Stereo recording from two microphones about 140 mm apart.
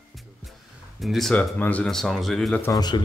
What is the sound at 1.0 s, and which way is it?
Speech, centre (ahead or behind).